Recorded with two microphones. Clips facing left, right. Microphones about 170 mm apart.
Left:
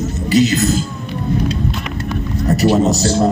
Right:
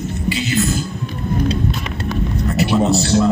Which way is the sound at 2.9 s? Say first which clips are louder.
Even; 40° left (ahead or behind).